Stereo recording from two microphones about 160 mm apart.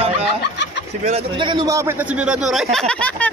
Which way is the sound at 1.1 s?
30° right (ahead or behind).